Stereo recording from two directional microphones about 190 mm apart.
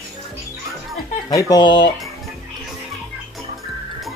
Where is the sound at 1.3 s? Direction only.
20° left (ahead or behind).